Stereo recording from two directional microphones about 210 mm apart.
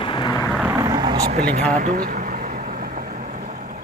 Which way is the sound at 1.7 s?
35° right (ahead or behind).